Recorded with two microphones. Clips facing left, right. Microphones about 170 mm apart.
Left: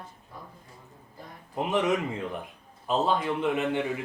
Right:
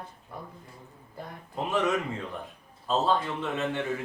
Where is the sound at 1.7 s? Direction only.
20° left (ahead or behind).